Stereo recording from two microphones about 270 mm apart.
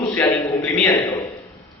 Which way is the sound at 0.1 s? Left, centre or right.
Centre.